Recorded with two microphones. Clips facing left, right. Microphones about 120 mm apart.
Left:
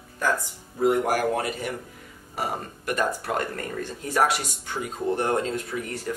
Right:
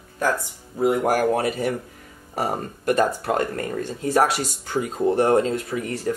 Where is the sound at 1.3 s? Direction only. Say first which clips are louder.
Right 5 dB; 35° right (ahead or behind).